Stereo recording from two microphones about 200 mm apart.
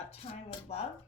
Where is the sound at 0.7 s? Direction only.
30° left (ahead or behind).